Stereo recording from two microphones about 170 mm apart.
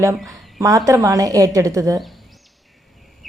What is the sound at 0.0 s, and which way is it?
A woman's voice, 20° right (ahead or behind).